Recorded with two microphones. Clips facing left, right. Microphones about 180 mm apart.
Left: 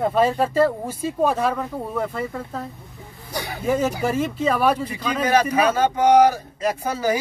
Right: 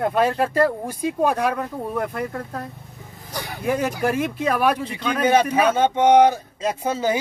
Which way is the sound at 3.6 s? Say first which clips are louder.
Even; 10° right (ahead or behind).